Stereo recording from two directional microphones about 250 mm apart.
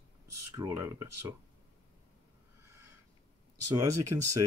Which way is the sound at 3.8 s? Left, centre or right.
Centre.